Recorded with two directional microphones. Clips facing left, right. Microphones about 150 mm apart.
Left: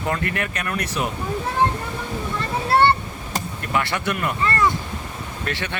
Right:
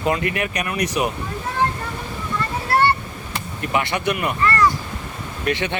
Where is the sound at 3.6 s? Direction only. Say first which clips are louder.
Right 3 dB; 20° right (ahead or behind).